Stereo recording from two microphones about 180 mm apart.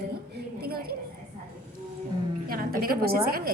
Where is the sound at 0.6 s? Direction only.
55° right (ahead or behind).